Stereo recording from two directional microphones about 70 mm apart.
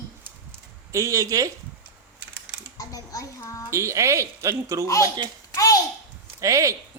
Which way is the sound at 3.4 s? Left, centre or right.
Left.